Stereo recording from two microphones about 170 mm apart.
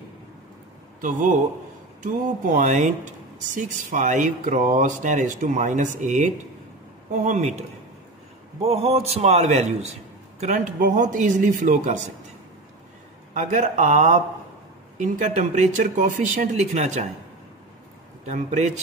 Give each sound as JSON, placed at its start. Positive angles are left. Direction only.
{"t": 2.0, "sound": "speech", "side_deg": -45}
{"t": 8.6, "sound": "a man's voice", "side_deg": -35}
{"t": 13.3, "sound": "speech", "side_deg": -45}
{"t": 18.2, "sound": "speech", "side_deg": -45}